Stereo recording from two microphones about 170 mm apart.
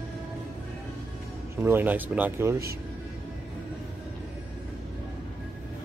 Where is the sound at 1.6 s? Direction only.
10° right (ahead or behind).